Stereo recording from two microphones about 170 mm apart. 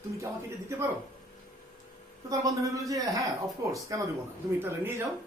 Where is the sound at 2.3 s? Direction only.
20° right (ahead or behind).